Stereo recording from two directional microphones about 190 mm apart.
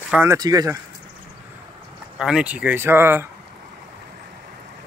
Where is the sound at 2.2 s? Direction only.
5° right (ahead or behind).